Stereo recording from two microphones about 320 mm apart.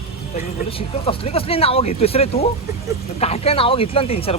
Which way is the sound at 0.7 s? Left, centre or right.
Centre.